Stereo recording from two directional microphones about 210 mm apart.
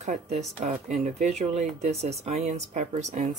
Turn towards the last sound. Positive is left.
turn(degrees=-35)  # may be behind; listen again after turning